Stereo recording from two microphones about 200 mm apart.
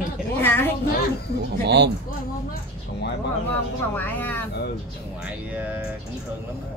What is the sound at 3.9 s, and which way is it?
Speech, 10° left (ahead or behind).